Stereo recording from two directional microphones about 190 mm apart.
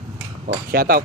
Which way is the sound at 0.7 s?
50° right (ahead or behind).